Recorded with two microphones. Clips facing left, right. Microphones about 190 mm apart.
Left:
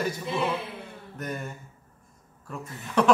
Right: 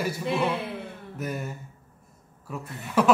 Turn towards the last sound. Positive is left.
turn(degrees=-5)  # may be behind; listen again after turning